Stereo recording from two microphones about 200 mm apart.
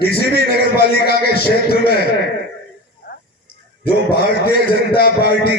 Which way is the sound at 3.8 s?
50° left (ahead or behind).